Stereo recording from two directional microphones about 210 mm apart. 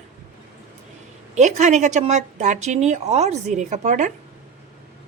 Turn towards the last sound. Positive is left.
turn(degrees=-35)  # may be behind; listen again after turning